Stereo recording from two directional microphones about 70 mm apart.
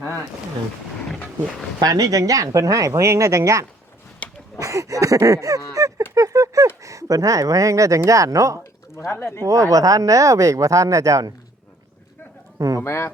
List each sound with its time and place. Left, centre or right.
1.8 s speech: right
4.2 s a sound: centre
4.6 s speech: right
5.7 s a sound: right
6.8 s speech: right
9.0 s speech: left
9.4 s speech: right
12.5 s speech: right
12.8 s speech: left